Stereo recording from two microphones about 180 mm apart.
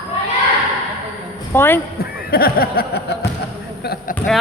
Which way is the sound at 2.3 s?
55° left (ahead or behind).